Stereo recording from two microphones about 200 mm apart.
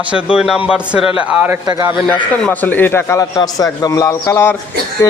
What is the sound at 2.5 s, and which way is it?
A man's voice, 10° left (ahead or behind).